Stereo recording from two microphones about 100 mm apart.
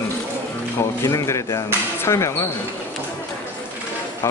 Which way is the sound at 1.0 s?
30° left (ahead or behind).